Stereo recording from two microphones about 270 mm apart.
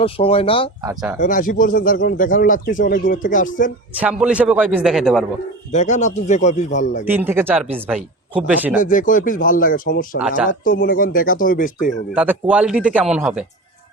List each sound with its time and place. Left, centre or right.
0.0 s speech: centre
0.8 s speech: centre
1.2 s speech: left
4.0 s speech: centre
5.7 s speech: left
7.0 s speech: centre
8.8 s speech: left
10.2 s speech: centre
10.6 s speech: left
11.9 s speech: centre